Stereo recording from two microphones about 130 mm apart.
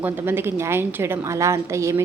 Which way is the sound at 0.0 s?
15° right (ahead or behind).